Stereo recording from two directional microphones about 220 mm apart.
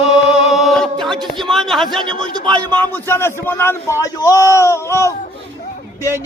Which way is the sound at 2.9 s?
10° left (ahead or behind).